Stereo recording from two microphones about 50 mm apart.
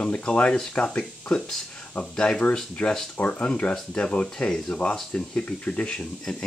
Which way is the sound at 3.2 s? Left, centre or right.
Left.